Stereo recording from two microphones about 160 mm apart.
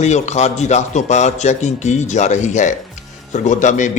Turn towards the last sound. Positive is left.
turn(degrees=50)  # may be behind; listen again after turning